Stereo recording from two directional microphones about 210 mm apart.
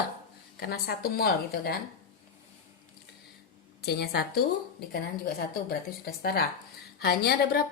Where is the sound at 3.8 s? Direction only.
50° left (ahead or behind).